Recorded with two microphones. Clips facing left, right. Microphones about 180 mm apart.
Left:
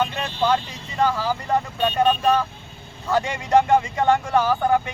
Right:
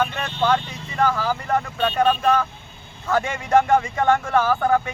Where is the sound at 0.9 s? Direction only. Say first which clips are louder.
Even; 15° left (ahead or behind).